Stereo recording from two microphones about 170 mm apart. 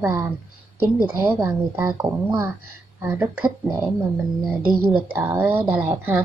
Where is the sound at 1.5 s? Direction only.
10° right (ahead or behind).